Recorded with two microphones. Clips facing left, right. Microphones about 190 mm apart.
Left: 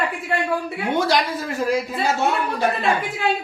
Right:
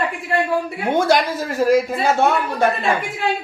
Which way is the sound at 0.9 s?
50° right (ahead or behind).